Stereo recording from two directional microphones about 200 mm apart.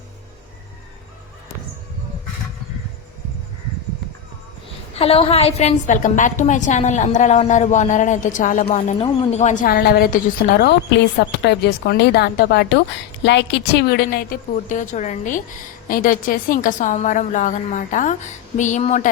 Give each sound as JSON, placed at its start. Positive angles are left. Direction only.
{"t": 4.9, "sound": "a woman's voice", "side_deg": 30}